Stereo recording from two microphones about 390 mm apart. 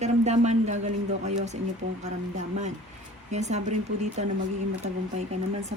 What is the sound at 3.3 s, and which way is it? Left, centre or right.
Speech, centre.